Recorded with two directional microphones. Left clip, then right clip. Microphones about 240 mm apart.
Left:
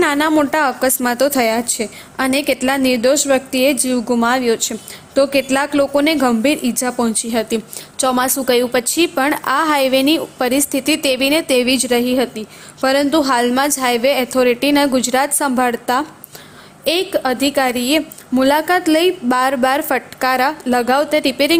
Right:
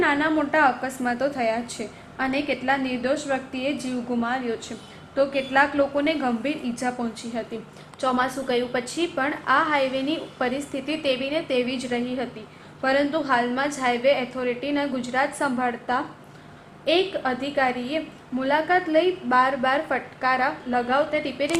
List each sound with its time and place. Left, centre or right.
0.0 s a woman's voice: left